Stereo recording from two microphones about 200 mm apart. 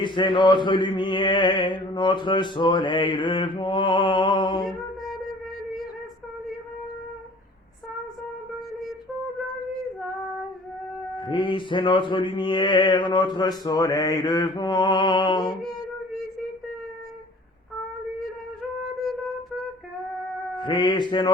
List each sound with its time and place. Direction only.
0.0 s mantra: 25° left (ahead or behind)
11.2 s mantra: 25° left (ahead or behind)
20.6 s mantra: 20° left (ahead or behind)